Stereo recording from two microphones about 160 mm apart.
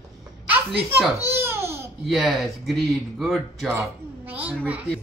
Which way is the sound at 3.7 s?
10° right (ahead or behind).